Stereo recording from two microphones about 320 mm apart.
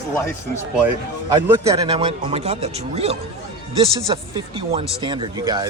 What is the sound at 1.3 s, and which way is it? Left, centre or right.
Speech, centre.